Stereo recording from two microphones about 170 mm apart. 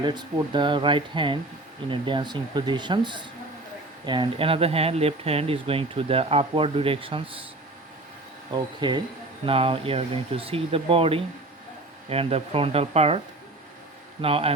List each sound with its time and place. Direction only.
0.0 s speech: 25° right (ahead or behind)
8.5 s speech: 25° right (ahead or behind)
14.2 s speech: 35° right (ahead or behind)